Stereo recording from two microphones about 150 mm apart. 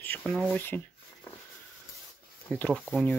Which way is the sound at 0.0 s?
5° left (ahead or behind).